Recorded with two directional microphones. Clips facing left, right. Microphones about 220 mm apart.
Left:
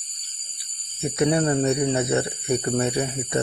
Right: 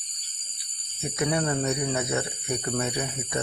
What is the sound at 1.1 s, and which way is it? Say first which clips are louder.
Speech: left 6 dB; 30° left (ahead or behind).